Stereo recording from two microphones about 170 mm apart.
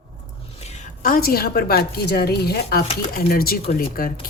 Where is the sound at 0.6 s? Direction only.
40° left (ahead or behind).